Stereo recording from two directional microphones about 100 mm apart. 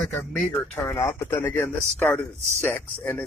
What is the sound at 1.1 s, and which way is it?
Speech, 25° left (ahead or behind).